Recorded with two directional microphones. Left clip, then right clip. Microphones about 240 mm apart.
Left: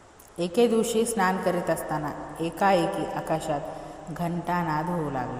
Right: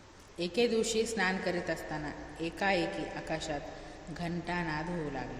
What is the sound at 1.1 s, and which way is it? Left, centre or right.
A woman's voice, centre.